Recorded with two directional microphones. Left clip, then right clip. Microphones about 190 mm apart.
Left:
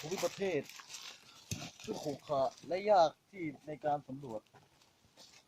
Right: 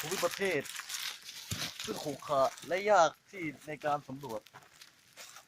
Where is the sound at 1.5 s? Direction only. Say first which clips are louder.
Right 5 dB; 20° right (ahead or behind).